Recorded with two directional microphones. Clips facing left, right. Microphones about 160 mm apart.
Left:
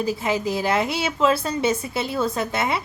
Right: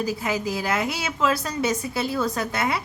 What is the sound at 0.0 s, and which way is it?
A woman's voice, 25° left (ahead or behind).